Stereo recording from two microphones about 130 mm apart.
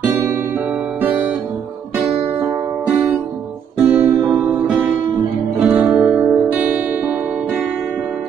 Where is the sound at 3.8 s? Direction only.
20° right (ahead or behind).